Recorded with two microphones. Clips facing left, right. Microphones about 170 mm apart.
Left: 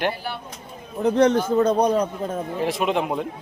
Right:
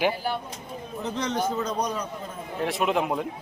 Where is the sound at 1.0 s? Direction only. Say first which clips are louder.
Left 10 dB; 60° left (ahead or behind).